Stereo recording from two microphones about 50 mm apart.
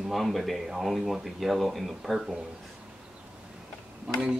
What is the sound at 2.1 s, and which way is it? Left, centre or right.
Speech, centre.